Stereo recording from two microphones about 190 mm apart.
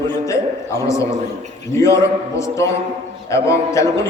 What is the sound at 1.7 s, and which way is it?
A man's voice, 15° left (ahead or behind).